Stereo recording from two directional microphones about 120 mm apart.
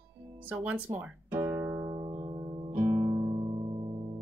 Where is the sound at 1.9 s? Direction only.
40° right (ahead or behind).